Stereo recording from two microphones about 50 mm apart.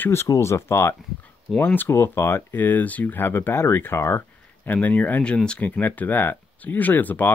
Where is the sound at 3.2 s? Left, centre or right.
Left.